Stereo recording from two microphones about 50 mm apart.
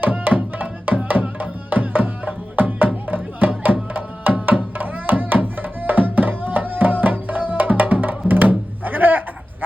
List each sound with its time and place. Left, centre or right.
0.0 s music: right